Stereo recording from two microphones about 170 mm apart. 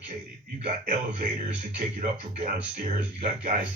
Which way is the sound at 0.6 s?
45° right (ahead or behind).